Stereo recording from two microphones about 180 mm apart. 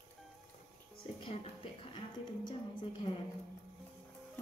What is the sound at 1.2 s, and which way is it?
A woman's voice, 30° left (ahead or behind).